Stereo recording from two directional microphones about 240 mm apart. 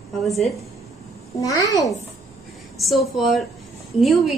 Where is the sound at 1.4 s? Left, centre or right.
Centre.